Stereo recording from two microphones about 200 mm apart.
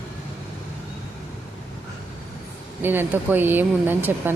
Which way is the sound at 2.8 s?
10° right (ahead or behind).